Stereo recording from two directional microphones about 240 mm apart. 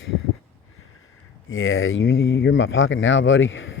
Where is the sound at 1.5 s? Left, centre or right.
Left.